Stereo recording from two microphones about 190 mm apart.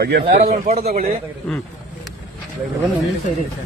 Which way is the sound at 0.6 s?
35° right (ahead or behind).